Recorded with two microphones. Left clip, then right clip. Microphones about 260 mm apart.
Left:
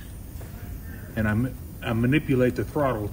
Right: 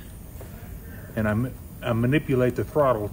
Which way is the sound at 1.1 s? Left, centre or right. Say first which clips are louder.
Right 1 dB; right.